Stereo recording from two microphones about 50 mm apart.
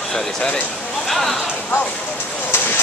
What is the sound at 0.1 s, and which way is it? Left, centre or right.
Speech, centre.